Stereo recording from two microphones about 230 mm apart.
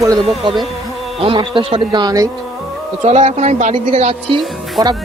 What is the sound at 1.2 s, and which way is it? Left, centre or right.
A woman's voice, right.